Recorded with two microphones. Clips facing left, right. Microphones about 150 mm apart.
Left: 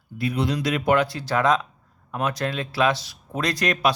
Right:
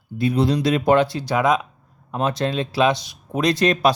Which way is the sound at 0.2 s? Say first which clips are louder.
Right 5 dB; 30° right (ahead or behind).